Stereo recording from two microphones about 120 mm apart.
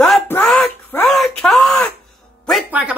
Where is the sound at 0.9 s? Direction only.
15° left (ahead or behind).